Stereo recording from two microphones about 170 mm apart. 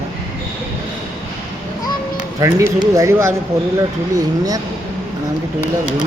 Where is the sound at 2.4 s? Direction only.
20° right (ahead or behind).